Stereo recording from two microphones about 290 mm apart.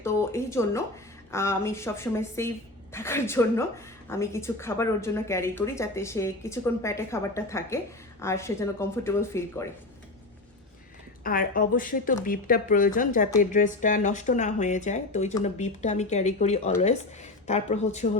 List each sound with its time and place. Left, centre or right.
0.0 s a woman's voice: centre
11.2 s speech: left